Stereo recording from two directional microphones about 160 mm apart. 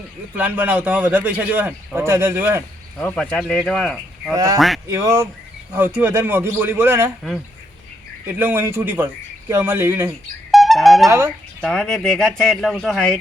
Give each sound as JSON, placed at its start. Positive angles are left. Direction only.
{"t": 0.3, "sound": "a man's voice", "side_deg": -10}
{"t": 3.0, "sound": "speech", "side_deg": 10}
{"t": 4.4, "sound": "a man's voice", "side_deg": -20}
{"t": 8.3, "sound": "a man's voice", "side_deg": -15}
{"t": 10.5, "sound": "wind instrument", "side_deg": 0}
{"t": 11.6, "sound": "speech", "side_deg": 5}